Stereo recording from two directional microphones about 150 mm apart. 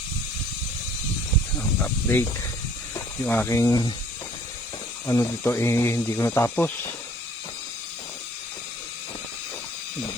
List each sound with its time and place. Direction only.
1.8 s speech: 10° left (ahead or behind)
5.0 s speech: 15° left (ahead or behind)